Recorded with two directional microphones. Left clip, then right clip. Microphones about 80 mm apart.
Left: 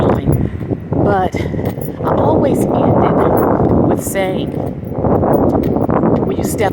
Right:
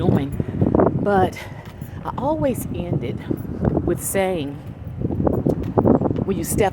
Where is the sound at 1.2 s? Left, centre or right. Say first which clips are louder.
Left 4 dB; right.